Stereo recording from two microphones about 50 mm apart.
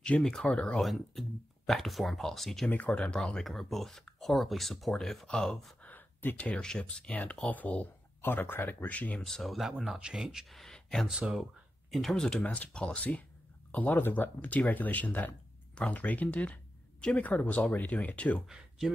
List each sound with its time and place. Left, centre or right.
0.0 s speech: centre
0.7 s speech: centre
2.7 s speech: left
3.2 s speech: centre
5.8 s a sound: left
6.3 s speech: left
8.2 s speech: left
9.2 s speech: centre
9.9 s speech: centre
10.5 s speech: centre
11.1 s speech: centre
11.9 s speech: centre; by 16.5 s left
17.0 s speech: centre
17.4 s speech: left